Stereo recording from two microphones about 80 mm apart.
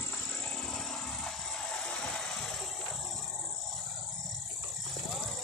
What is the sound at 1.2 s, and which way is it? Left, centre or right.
Music, centre.